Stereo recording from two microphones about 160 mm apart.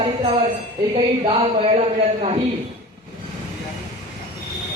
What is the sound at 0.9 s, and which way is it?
Speech, 35° right (ahead or behind).